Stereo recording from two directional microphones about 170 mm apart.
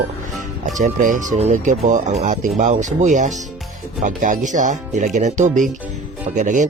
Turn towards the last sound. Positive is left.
turn(degrees=-45)  # may be behind; listen again after turning